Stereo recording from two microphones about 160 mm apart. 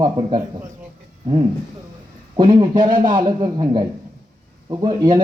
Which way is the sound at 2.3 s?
30° right (ahead or behind).